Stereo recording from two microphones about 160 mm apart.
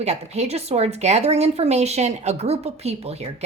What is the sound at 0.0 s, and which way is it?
A woman's voice, 45° right (ahead or behind).